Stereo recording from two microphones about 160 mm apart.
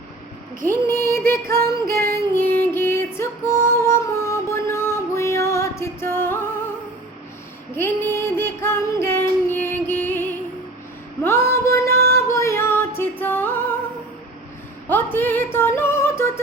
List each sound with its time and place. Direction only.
0.7 s female singing: 15° left (ahead or behind)
2.1 s music: 15° left (ahead or behind)
8.1 s music: 15° left (ahead or behind)
11.2 s female singing: 15° left (ahead or behind)
14.8 s a sound: 10° left (ahead or behind)
15.5 s music: 15° left (ahead or behind)